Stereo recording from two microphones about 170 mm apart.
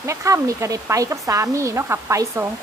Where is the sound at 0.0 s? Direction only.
15° right (ahead or behind).